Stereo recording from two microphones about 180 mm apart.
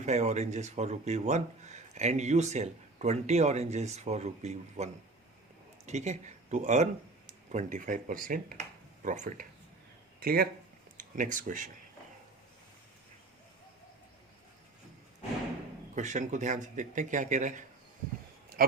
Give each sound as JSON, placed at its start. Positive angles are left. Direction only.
{"t": 0.0, "sound": "speech", "side_deg": -40}
{"t": 10.2, "sound": "speech", "side_deg": -60}
{"t": 10.9, "sound": "speech", "side_deg": -45}
{"t": 16.0, "sound": "speech", "side_deg": -40}